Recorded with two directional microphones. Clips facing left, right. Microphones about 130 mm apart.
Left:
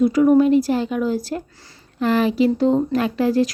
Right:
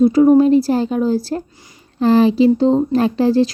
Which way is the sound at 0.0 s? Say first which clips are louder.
Right 4 dB; 30° right (ahead or behind).